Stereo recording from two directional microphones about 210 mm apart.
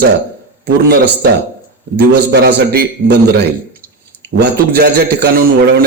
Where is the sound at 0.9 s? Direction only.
50° right (ahead or behind).